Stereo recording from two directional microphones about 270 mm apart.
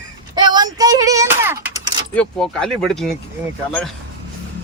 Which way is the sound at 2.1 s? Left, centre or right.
Centre.